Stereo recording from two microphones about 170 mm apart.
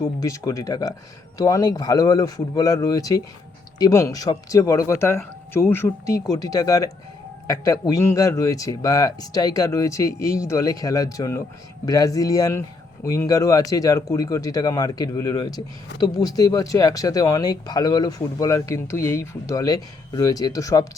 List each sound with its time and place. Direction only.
0.2 s speech: 20° left (ahead or behind)